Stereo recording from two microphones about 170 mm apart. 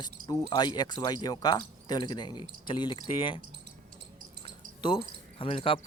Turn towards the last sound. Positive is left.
turn(degrees=35)  # may be behind; listen again after turning